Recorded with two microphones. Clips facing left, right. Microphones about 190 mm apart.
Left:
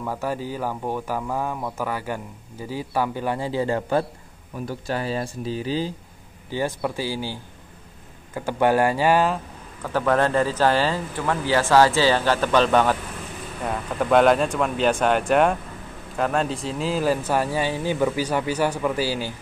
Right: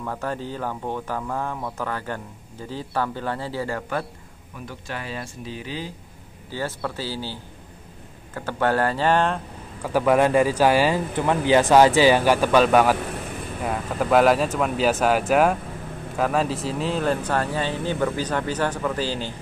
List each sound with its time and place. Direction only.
0.0 s speech: 10° left (ahead or behind)
4.6 s speech: 35° left (ahead or behind)
6.5 s speech: 15° left (ahead or behind)
8.4 s speech: 15° left (ahead or behind)
9.8 s speech: 10° right (ahead or behind); by 19.3 s 10° left (ahead or behind)